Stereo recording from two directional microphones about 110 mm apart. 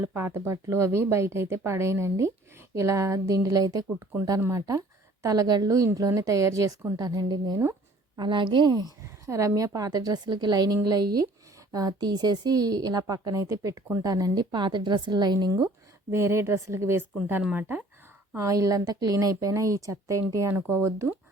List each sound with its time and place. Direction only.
0.0 s a woman's voice: 20° right (ahead or behind); by 15.7 s 35° right (ahead or behind)
16.1 s speech: 25° right (ahead or behind)
18.3 s a woman's voice: 30° right (ahead or behind)